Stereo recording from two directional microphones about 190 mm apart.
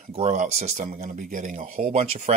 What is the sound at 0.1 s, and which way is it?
Speech, 40° right (ahead or behind).